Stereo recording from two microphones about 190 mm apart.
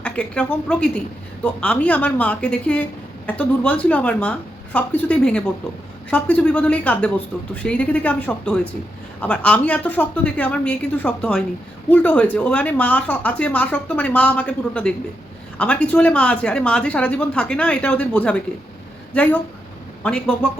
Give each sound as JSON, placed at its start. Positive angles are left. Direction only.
{"t": 0.0, "sound": "a woman's voice", "side_deg": 5}